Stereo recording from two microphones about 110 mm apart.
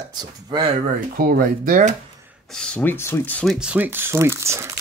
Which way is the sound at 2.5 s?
10° left (ahead or behind).